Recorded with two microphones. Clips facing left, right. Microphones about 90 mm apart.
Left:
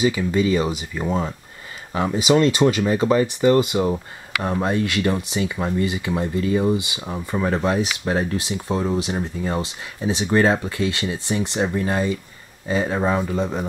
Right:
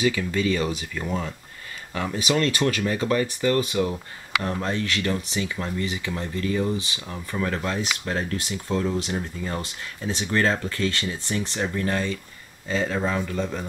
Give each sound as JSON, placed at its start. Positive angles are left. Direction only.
{"t": 0.0, "sound": "speech", "side_deg": 20}